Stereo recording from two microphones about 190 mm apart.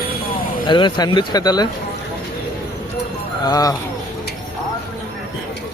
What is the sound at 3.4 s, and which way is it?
Speech, 20° left (ahead or behind).